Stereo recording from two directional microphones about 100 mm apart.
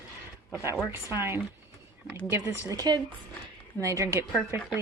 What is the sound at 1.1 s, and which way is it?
Speech, 25° right (ahead or behind).